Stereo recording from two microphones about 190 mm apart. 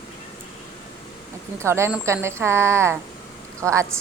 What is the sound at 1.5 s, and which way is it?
A woman's voice, 15° right (ahead or behind).